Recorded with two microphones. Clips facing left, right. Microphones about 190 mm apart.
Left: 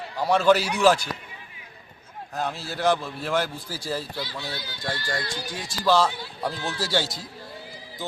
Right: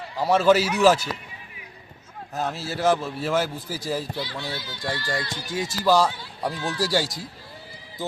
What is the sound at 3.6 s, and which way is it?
Speech, 15° right (ahead or behind).